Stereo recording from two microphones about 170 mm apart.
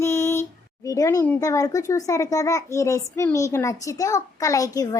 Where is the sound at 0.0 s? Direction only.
15° left (ahead or behind).